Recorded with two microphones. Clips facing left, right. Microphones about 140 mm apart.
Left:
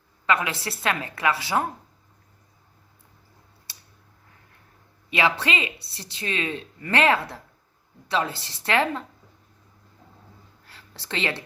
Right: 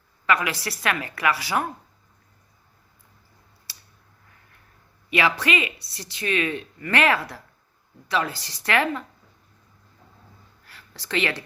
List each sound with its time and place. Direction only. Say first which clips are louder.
0.3 s speech: right 1 dB; 25° left (ahead or behind)
5.1 s speech: right 1 dB; 25° left (ahead or behind)
10.7 s a sound: right 4 dB; 25° left (ahead or behind)